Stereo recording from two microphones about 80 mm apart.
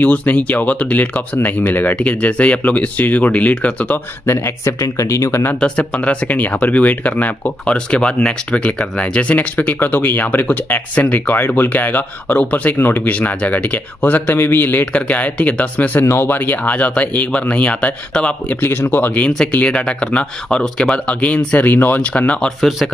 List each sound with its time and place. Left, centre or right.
0.0 s speech: centre
4.9 s speech: left
5.6 s speech: centre
18.6 s speech: left
22.6 s speech: centre